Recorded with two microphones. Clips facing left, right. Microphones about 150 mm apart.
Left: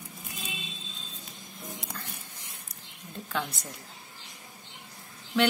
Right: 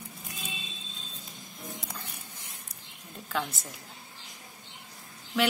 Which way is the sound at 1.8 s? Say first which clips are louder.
Left 1 dB; 5° right (ahead or behind).